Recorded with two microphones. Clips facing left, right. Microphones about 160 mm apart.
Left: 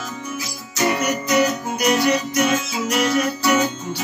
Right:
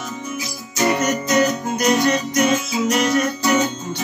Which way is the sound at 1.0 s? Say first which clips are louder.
Right 1 dB; 10° left (ahead or behind).